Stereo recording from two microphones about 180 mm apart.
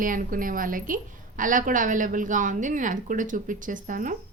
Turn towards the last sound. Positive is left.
turn(degrees=-45)  # may be behind; listen again after turning